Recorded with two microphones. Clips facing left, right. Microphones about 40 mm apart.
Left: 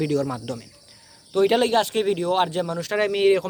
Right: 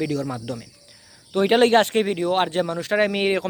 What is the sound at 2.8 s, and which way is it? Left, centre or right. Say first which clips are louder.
Speech: even; right.